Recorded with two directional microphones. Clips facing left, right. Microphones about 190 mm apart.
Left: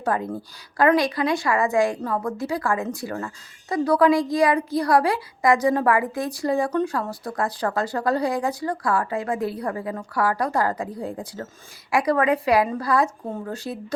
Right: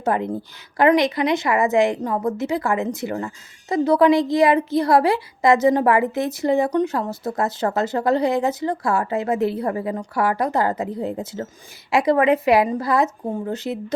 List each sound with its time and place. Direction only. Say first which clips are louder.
0.0 s a woman's voice: right 3 dB; 25° right (ahead or behind)